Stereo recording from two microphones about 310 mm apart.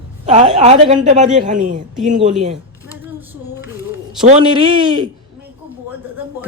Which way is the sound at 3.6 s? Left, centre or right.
Centre.